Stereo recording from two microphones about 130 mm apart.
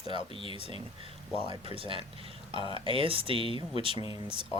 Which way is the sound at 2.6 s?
45° left (ahead or behind).